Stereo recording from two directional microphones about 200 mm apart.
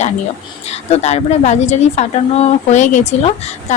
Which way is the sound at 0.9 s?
35° left (ahead or behind).